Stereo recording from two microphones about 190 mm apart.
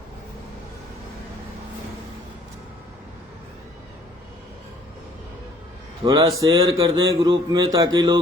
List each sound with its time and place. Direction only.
6.1 s a man's voice: 20° right (ahead or behind)